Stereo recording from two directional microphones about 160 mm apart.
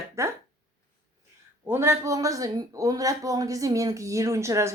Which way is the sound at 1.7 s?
15° right (ahead or behind).